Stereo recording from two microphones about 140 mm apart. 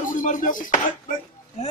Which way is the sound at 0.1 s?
70° left (ahead or behind).